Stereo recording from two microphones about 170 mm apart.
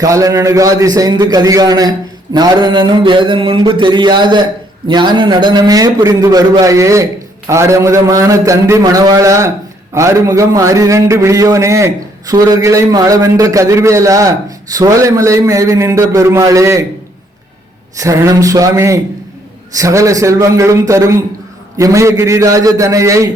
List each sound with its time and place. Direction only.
0.0 s a man's voice: 20° right (ahead or behind)
17.9 s a man's voice: 20° right (ahead or behind)